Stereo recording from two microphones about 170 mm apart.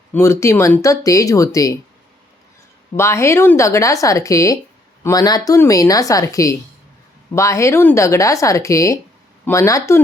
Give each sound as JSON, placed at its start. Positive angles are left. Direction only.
{"t": 0.1, "sound": "speech", "side_deg": 15}
{"t": 2.9, "sound": "speech", "side_deg": 15}